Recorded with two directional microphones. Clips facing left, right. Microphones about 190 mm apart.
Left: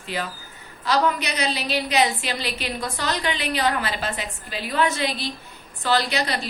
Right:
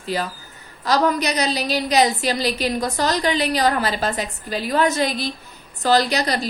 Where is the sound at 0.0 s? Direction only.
40° right (ahead or behind).